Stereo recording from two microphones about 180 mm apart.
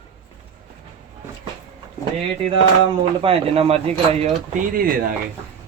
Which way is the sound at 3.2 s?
30° right (ahead or behind).